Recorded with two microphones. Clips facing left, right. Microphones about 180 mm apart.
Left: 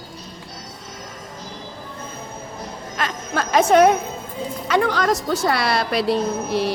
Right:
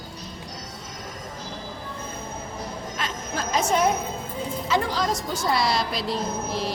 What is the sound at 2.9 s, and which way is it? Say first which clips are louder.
Music: left 8 dB; 65° left (ahead or behind).